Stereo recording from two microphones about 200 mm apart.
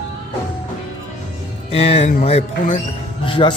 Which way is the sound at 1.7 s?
30° left (ahead or behind).